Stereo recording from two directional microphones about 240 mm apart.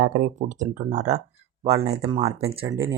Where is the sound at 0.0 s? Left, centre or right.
Right.